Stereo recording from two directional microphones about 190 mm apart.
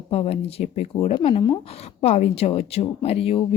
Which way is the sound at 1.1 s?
25° left (ahead or behind).